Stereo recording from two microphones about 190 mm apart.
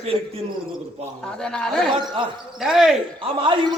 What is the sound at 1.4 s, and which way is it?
A man's voice, 5° left (ahead or behind).